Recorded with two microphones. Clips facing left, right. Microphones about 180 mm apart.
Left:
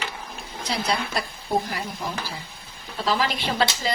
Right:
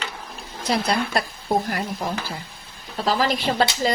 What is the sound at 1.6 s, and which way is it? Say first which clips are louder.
Speech: right 4 dB; 55° right (ahead or behind).